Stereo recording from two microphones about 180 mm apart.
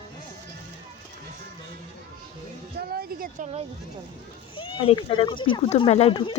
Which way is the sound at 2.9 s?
55° right (ahead or behind).